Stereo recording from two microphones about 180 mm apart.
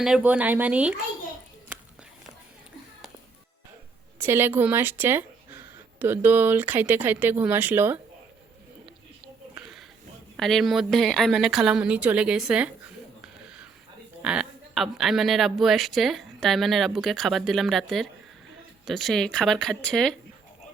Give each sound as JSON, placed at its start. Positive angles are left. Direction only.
{"t": 0.0, "sound": "speech", "side_deg": -5}
{"t": 4.2, "sound": "speech", "side_deg": -10}
{"t": 9.2, "sound": "a sound", "side_deg": -5}
{"t": 10.3, "sound": "speech", "side_deg": 0}
{"t": 13.2, "sound": "a sound", "side_deg": -5}
{"t": 14.2, "sound": "speech", "side_deg": -5}